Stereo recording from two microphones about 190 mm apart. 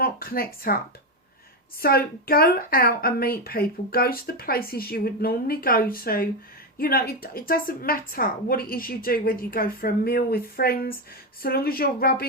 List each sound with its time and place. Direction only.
0.0 s speech: 50° left (ahead or behind)
1.8 s a woman's voice: 55° left (ahead or behind)